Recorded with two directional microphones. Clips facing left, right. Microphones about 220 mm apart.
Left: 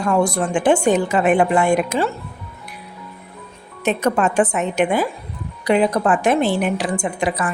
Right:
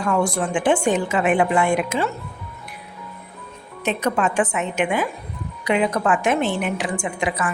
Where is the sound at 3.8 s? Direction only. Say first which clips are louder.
Left 3 dB; 45° left (ahead or behind).